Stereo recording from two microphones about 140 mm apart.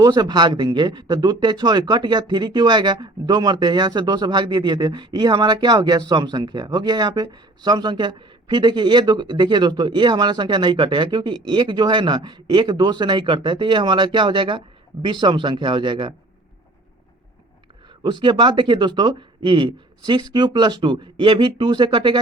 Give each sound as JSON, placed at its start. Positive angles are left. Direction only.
{"t": 0.0, "sound": "speech", "side_deg": -30}
{"t": 18.0, "sound": "speech", "side_deg": -35}